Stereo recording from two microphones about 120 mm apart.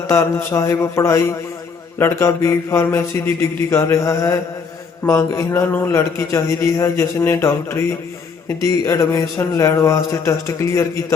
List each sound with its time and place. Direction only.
0.1 s a man's voice: 25° left (ahead or behind)